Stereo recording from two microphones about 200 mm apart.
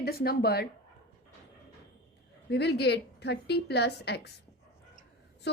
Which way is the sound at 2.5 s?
55° left (ahead or behind).